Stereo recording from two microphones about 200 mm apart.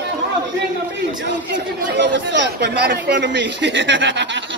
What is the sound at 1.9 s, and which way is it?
Speech, 60° right (ahead or behind).